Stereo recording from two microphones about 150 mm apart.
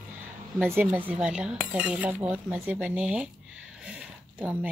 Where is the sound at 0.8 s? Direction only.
15° right (ahead or behind).